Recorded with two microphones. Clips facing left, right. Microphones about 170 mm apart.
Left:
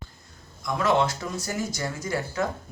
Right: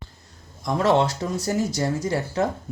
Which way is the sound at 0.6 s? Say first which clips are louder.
Right 3 dB; 35° right (ahead or behind).